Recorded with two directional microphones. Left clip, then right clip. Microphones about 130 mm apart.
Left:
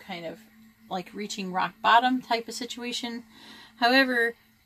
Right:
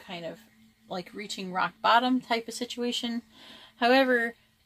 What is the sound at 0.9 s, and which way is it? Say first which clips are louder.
Speech: left 3 dB; 80° right.